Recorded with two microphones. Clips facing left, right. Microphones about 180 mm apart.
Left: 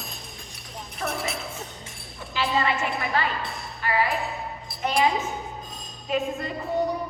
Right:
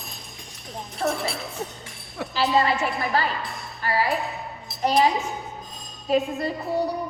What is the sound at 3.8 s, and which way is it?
Music, 40° right (ahead or behind).